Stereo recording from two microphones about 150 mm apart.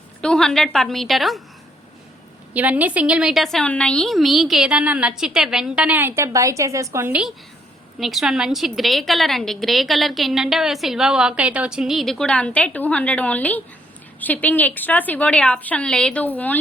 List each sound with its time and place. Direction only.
0.2 s a woman's voice: 5° left (ahead or behind)
2.5 s a woman's voice: 10° right (ahead or behind)
7.9 s a woman's voice: centre (ahead or behind)